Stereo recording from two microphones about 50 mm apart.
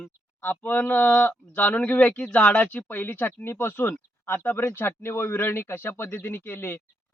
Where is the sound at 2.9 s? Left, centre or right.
Left.